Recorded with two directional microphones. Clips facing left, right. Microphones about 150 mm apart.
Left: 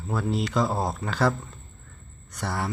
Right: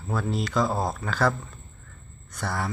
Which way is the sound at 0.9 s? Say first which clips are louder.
Left 1 dB; 20° left (ahead or behind).